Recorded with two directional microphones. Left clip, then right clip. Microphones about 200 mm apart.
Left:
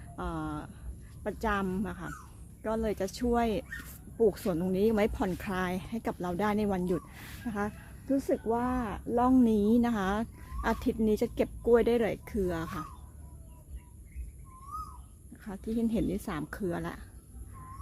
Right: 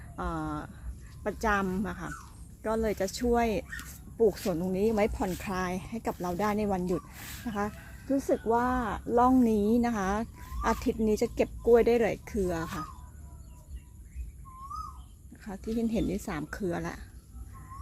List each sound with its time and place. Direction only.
0.2 s speech: 5° right (ahead or behind)
15.4 s speech: centre (ahead or behind)